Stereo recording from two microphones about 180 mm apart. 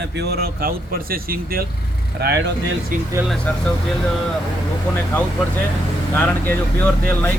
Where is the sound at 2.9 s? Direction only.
50° right (ahead or behind).